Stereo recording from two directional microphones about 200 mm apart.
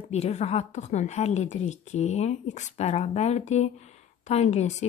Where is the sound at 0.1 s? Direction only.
35° left (ahead or behind).